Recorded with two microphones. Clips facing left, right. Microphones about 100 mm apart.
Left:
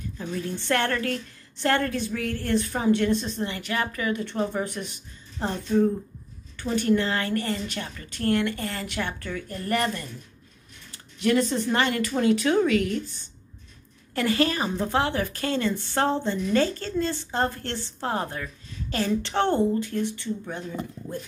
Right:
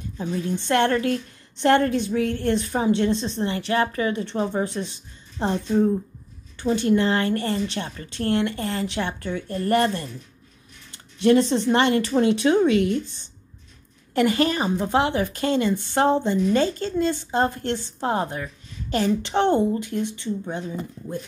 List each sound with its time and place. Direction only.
0.2 s a woman's voice: 20° right (ahead or behind)
9.6 s speech: 35° right (ahead or behind)
11.1 s a woman's voice: 25° right (ahead or behind)